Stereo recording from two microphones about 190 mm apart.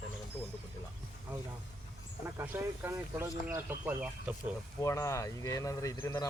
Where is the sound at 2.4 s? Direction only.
15° right (ahead or behind).